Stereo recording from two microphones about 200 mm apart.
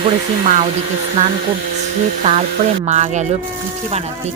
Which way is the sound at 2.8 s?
35° right (ahead or behind).